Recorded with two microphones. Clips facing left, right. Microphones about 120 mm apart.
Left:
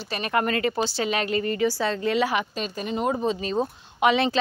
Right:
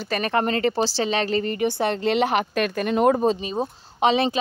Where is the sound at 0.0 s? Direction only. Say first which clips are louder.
Right 5 dB; 45° right (ahead or behind).